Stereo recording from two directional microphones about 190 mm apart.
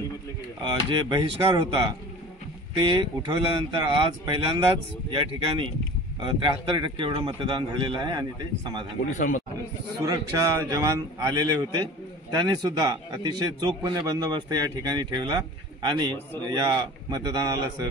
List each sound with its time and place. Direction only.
0.6 s speech: 25° right (ahead or behind)
10.0 s speech: 15° right (ahead or behind)